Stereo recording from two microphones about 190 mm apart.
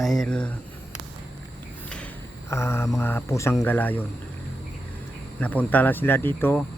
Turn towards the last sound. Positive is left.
turn(degrees=10)  # may be behind; listen again after turning